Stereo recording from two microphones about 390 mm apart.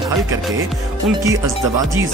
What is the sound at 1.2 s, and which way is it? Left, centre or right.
Speech, centre.